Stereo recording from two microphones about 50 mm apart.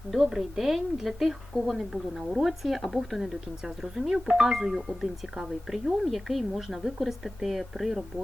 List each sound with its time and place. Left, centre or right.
0.1 s speech: centre
4.3 s speech: centre